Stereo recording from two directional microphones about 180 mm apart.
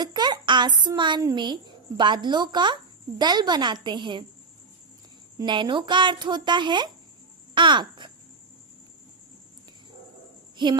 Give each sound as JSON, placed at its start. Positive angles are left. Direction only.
{"t": 0.0, "sound": "speech", "side_deg": -25}
{"t": 5.4, "sound": "speech", "side_deg": -25}
{"t": 7.5, "sound": "a sound", "side_deg": -25}